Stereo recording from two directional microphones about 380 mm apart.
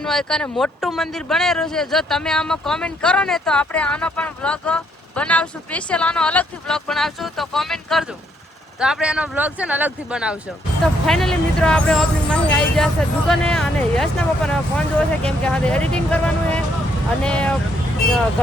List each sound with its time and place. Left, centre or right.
0.0 s speech: centre